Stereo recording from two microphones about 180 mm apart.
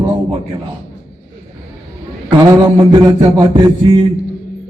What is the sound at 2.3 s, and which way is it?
Mantra, 25° right (ahead or behind).